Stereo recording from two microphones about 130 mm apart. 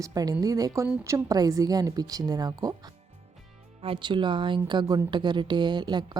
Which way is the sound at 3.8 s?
40° right (ahead or behind).